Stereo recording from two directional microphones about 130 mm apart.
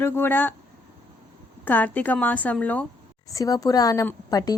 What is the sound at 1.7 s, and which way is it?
A woman's voice, 15° left (ahead or behind).